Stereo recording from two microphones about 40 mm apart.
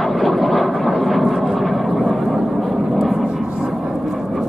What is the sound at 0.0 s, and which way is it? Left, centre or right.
Vehicle, centre.